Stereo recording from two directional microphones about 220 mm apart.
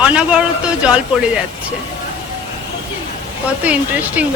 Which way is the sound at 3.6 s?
5° right (ahead or behind).